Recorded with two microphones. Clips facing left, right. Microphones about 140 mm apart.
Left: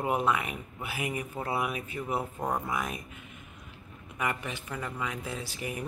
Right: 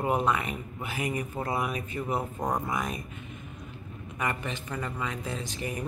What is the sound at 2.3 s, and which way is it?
Speech, 15° right (ahead or behind).